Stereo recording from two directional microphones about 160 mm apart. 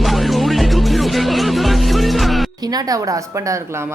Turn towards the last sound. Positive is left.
turn(degrees=-15)  # may be behind; listen again after turning